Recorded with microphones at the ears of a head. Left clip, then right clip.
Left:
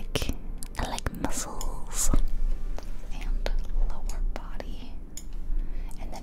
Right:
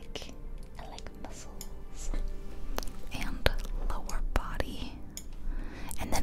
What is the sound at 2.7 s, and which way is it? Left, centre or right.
Whispering, right.